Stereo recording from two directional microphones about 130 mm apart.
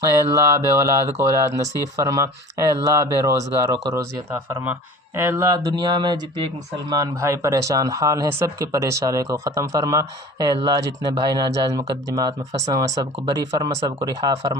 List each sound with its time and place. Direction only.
0.3 s speech: 20° right (ahead or behind)
6.9 s speech: 25° right (ahead or behind)